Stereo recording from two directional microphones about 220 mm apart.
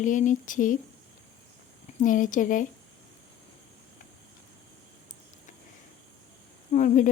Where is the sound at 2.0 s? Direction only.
35° left (ahead or behind).